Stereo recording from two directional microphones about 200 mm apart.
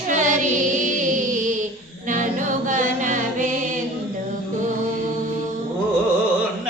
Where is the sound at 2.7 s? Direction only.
40° right (ahead or behind).